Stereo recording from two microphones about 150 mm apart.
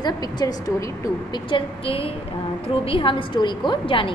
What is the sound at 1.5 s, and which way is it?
A woman's voice, 40° left (ahead or behind).